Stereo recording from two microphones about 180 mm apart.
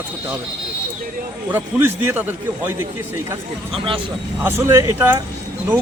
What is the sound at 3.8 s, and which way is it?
Speech, 30° right (ahead or behind).